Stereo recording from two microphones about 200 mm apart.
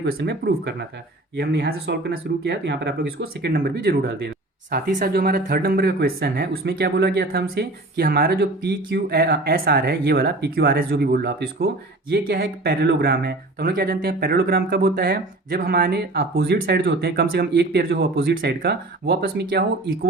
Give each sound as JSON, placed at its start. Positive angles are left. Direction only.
{"t": 0.0, "sound": "speech", "side_deg": -55}